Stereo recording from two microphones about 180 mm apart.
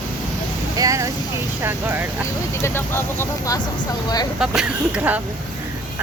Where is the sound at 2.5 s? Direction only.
15° left (ahead or behind).